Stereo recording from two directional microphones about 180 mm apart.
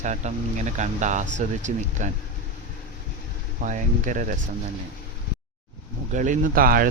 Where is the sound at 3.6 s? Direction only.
45° right (ahead or behind).